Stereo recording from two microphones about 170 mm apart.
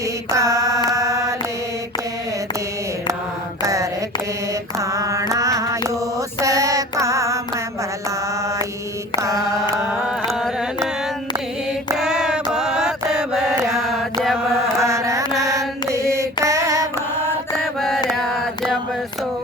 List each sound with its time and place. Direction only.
0.3 s mantra: 20° right (ahead or behind)
3.6 s mantra: 20° right (ahead or behind)
6.4 s music: 20° right (ahead or behind)
9.1 s mantra: 20° right (ahead or behind)
10.2 s music: centre (ahead or behind)
11.9 s music: 5° right (ahead or behind)
14.8 s carnatic music: 15° right (ahead or behind)
15.4 s mantra: 20° right (ahead or behind)
17.7 s mantra: centre (ahead or behind)
18.2 s carnatic music: centre (ahead or behind)